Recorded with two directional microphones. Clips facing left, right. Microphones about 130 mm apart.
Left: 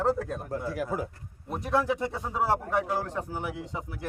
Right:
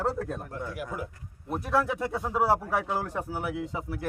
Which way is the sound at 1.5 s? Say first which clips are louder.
Even; centre (ahead or behind).